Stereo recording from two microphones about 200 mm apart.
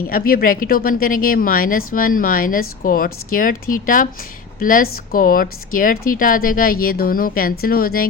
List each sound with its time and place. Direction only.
0.1 s speech: 45° left (ahead or behind)